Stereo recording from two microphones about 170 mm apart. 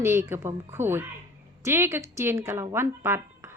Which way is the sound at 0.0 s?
15° right (ahead or behind).